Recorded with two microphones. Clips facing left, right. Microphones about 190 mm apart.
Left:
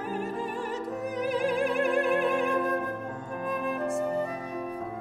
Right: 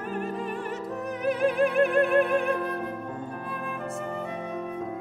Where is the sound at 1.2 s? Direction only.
60° right (ahead or behind).